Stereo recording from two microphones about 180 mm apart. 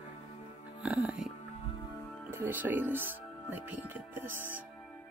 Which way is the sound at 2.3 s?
10° right (ahead or behind).